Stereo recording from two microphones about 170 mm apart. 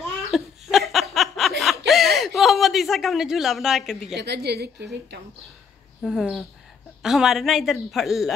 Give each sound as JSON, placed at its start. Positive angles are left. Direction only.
{"t": 0.3, "sound": "laughter", "side_deg": 0}
{"t": 1.9, "sound": "a sound", "side_deg": 0}
{"t": 4.1, "sound": "a woman's voice", "side_deg": -80}
{"t": 6.0, "sound": "a woman's voice", "side_deg": 0}